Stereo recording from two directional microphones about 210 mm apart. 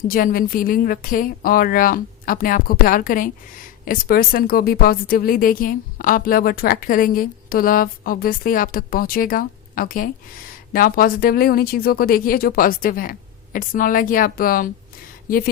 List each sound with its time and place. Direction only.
0.1 s a woman's voice: 40° left (ahead or behind)